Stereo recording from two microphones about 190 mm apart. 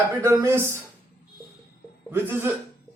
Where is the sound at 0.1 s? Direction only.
15° right (ahead or behind).